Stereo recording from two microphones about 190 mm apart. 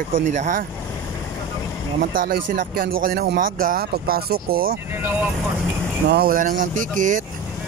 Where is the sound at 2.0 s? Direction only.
45° right (ahead or behind).